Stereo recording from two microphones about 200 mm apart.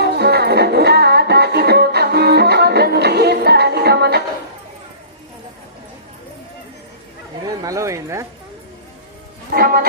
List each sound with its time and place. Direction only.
0.0 s music: 55° right (ahead or behind)
7.4 s speech: 15° right (ahead or behind)
9.5 s music: 50° right (ahead or behind)